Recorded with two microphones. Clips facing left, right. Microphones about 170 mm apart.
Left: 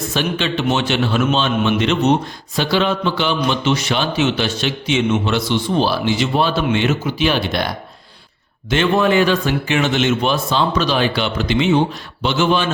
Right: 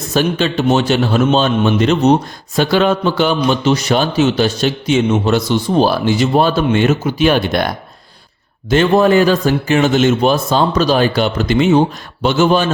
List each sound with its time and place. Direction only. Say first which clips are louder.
0.1 s a man's voice: right 7 dB; 40° right (ahead or behind)
8.7 s a man's voice: right 5 dB; 40° right (ahead or behind)